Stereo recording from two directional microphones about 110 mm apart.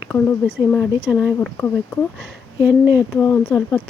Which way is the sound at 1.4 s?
15° left (ahead or behind).